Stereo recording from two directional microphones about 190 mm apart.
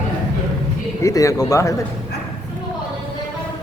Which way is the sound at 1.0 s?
15° left (ahead or behind).